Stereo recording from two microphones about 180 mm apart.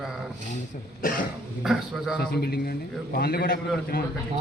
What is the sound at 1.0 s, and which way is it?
Speech, 50° left (ahead or behind).